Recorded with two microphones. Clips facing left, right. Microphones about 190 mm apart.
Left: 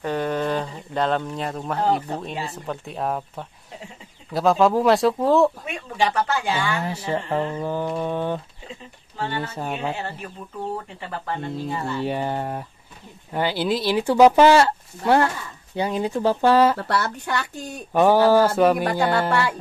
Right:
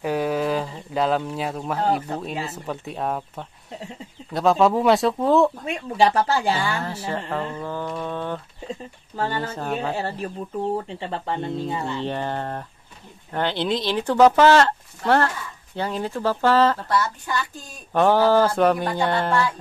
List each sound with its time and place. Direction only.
0.0 s speech: 10° right (ahead or behind)
5.9 s speech: 35° right (ahead or behind)
6.8 s speech: 15° left (ahead or behind)
8.6 s speech: 40° right (ahead or behind)
9.6 s speech: 10° left (ahead or behind)
9.9 s speech: 35° right (ahead or behind)
12.0 s speech: 10° left (ahead or behind)
16.7 s a woman's voice: 65° left (ahead or behind)
17.9 s speech: 10° left (ahead or behind)